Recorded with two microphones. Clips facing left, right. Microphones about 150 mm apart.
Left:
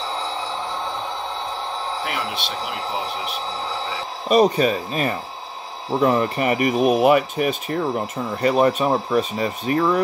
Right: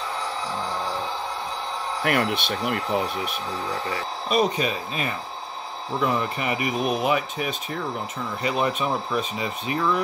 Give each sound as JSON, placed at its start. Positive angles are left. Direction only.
{"t": 2.0, "sound": "speech", "side_deg": -60}
{"t": 3.6, "sound": "a sound", "side_deg": 30}
{"t": 4.3, "sound": "speech", "side_deg": 45}
{"t": 8.4, "sound": "speech", "side_deg": 45}